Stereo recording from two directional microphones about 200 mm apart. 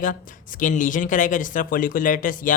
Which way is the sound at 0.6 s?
40° left (ahead or behind).